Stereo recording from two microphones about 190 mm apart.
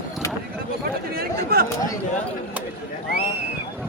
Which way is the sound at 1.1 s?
55° right (ahead or behind).